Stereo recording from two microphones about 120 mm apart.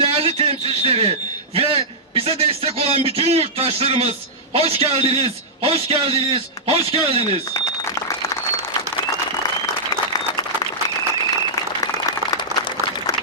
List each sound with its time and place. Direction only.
0.0 s a man's voice: 50° right (ahead or behind)